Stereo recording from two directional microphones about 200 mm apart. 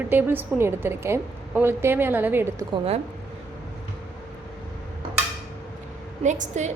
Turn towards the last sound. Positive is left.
turn(degrees=-35)  # may be behind; listen again after turning